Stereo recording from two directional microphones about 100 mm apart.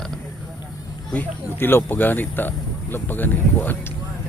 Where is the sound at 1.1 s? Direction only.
20° left (ahead or behind).